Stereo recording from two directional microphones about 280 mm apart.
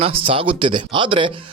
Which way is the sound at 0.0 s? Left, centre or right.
Centre.